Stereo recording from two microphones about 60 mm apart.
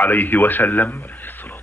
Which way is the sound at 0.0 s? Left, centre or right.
Left.